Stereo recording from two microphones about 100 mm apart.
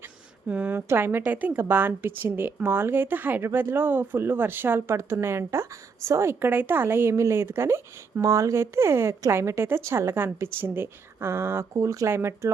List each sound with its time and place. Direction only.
0.4 s a woman's voice: 15° right (ahead or behind)